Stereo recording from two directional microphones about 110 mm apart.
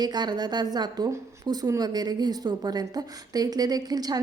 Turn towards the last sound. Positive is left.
turn(degrees=-35)  # may be behind; listen again after turning